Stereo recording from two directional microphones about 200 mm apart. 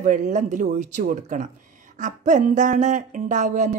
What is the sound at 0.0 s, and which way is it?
Speech, 35° right (ahead or behind).